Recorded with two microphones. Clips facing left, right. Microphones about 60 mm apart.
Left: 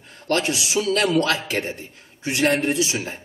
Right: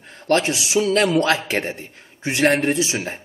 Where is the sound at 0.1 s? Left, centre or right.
Right.